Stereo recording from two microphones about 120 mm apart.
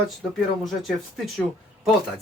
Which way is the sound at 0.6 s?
Centre (ahead or behind).